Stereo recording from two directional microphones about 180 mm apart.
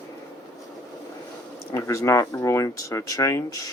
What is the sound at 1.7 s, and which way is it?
Speech, 15° left (ahead or behind).